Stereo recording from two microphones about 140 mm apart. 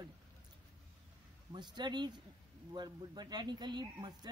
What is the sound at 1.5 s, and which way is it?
A man's voice, 30° right (ahead or behind).